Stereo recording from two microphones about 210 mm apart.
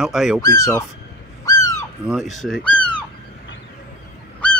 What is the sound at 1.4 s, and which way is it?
Owl, 15° left (ahead or behind).